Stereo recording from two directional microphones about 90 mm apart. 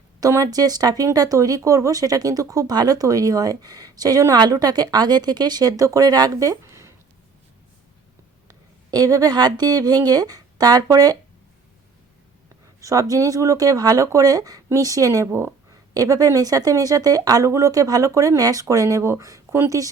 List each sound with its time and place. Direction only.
0.2 s speech: 35° right (ahead or behind)
8.4 s a woman's voice: 40° right (ahead or behind)
12.8 s speech: 40° right (ahead or behind)